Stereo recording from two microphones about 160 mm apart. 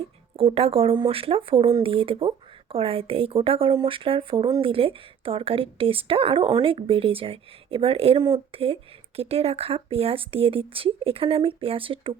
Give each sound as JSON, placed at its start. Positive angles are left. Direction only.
{"t": 0.3, "sound": "speech", "side_deg": -40}